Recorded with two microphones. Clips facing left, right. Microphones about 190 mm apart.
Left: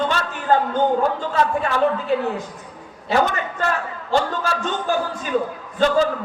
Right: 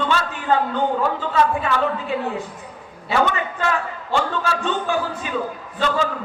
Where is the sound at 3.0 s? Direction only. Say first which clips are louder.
Left 1 dB; 40° left (ahead or behind).